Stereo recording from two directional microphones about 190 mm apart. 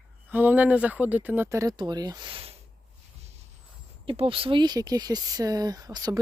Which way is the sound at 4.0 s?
30° right (ahead or behind).